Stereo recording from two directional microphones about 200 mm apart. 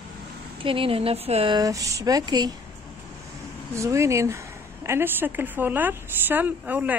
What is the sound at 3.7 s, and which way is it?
A woman's voice, 15° right (ahead or behind).